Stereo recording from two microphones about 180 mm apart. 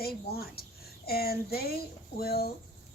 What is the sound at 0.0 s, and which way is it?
A woman's voice, 60° left (ahead or behind).